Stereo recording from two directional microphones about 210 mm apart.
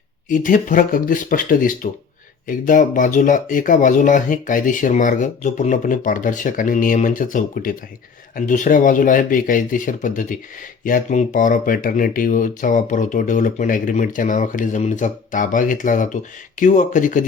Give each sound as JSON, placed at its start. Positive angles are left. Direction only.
{"t": 0.3, "sound": "speech", "side_deg": 40}